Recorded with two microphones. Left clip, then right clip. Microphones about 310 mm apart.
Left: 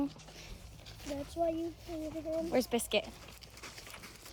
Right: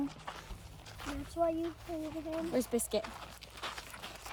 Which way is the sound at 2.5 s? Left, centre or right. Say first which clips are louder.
Left 2 dB; centre.